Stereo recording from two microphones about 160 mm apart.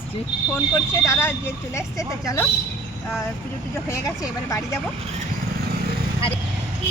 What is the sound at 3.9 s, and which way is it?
Speech, 20° left (ahead or behind).